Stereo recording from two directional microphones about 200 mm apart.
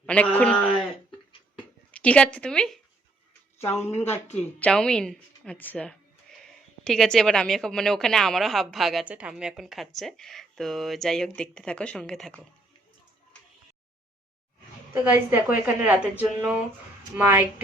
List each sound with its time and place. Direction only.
0.0 s a woman's voice: 5° left (ahead or behind)
1.9 s a woman's voice: 5° left (ahead or behind)
3.8 s a woman's voice: 30° left (ahead or behind)
4.6 s a woman's voice: 5° left (ahead or behind)
14.9 s a woman's voice: 10° right (ahead or behind)